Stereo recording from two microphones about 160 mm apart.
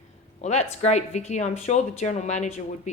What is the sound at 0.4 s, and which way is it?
Speech, 45° left (ahead or behind).